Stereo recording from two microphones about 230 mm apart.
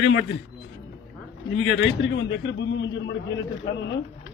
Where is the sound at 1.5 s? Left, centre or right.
Left.